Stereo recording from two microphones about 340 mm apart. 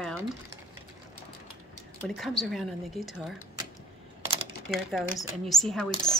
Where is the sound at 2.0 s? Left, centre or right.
Centre.